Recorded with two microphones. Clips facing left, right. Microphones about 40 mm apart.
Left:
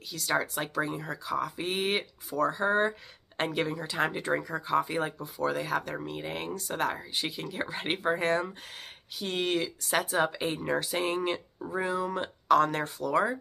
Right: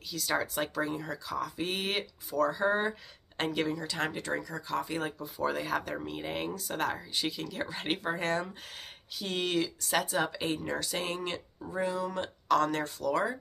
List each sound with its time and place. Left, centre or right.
0.1 s speech: centre
5.2 s speech: centre